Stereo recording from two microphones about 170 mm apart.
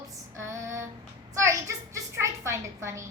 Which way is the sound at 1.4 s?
20° right (ahead or behind).